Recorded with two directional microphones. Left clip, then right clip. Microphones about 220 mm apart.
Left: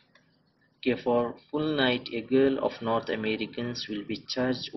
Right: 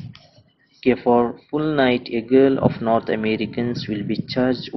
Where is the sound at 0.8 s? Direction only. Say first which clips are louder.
Right 9 dB; 40° right (ahead or behind).